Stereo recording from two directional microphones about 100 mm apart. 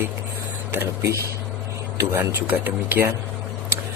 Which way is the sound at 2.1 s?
20° right (ahead or behind).